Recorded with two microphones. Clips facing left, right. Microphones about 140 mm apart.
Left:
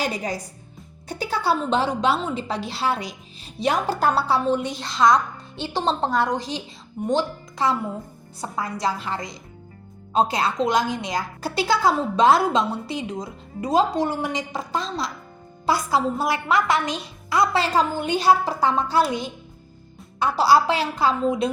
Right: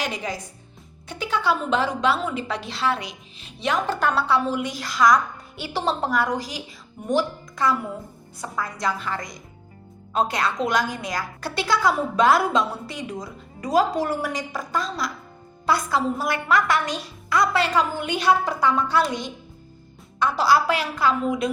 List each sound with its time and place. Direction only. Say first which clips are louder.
0.0 s a woman's voice: left 2 dB; 40° left (ahead or behind)
4.4 s a woman's voice: left 3 dB; 5° right (ahead or behind)
4.7 s a woman's voice: right 1 dB; 25° left (ahead or behind)
19.0 s a woman's voice: left 2 dB; 5° left (ahead or behind)
20.2 s a woman's voice: left 2 dB; 30° left (ahead or behind)